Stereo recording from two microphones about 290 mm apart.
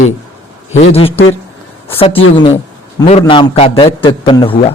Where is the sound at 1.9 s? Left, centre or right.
Centre.